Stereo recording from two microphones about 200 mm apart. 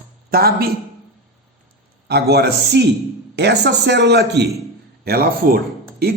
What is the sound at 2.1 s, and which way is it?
A man's voice, 55° right (ahead or behind).